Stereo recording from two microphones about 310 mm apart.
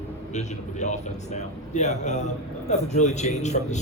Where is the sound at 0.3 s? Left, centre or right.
Left.